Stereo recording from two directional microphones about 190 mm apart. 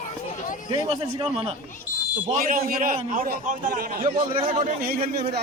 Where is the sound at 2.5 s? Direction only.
50° right (ahead or behind).